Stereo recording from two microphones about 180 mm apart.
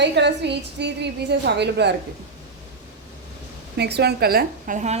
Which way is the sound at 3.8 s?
65° right (ahead or behind).